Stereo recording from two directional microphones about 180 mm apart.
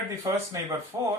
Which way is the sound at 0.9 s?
20° right (ahead or behind).